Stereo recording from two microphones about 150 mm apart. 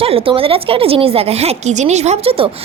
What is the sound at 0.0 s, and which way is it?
A woman's voice, 40° right (ahead or behind).